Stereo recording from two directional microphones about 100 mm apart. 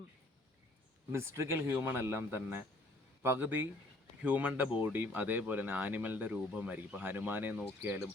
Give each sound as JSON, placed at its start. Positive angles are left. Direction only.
{"t": 1.1, "sound": "a man's voice", "side_deg": -25}